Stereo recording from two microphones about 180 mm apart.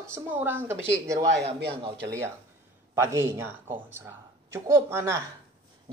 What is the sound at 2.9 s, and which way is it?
A woman's voice, 15° right (ahead or behind).